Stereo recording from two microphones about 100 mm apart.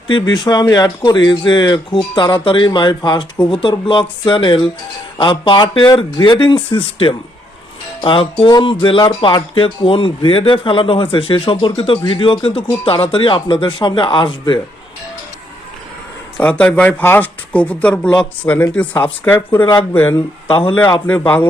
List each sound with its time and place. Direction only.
0.1 s speech: 50° left (ahead or behind)
16.4 s speech: 15° left (ahead or behind)